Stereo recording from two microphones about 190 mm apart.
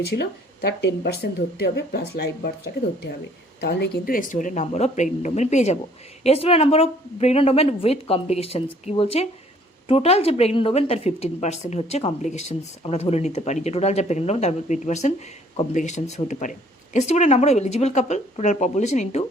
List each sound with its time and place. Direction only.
0.2 s speech: 65° left (ahead or behind)
3.6 s a woman's voice: 60° left (ahead or behind); by 19.2 s 35° left (ahead or behind)